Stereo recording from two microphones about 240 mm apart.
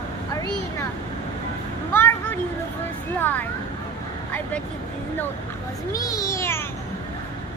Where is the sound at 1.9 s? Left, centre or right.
Centre.